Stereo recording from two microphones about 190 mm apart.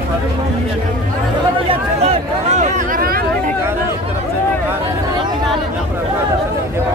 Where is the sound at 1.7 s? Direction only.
35° right (ahead or behind).